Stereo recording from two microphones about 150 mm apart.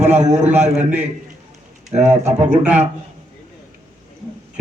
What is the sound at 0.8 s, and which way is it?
Speech, 10° right (ahead or behind).